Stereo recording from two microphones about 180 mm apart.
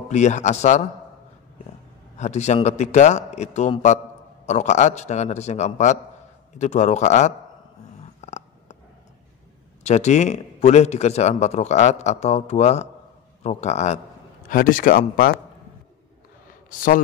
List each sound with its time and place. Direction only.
0.1 s speech: 40° left (ahead or behind)
2.1 s speech: 40° left (ahead or behind)
8.2 s a sound: 40° left (ahead or behind)
9.8 s speech: 40° left (ahead or behind)
16.7 s speech: 50° left (ahead or behind)